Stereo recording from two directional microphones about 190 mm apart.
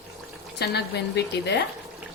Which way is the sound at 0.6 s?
60° left (ahead or behind).